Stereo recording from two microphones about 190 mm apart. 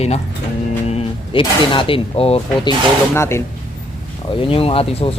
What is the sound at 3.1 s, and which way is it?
Speech, 15° left (ahead or behind).